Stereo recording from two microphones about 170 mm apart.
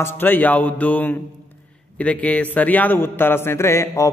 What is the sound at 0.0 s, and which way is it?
A man's voice, 10° left (ahead or behind).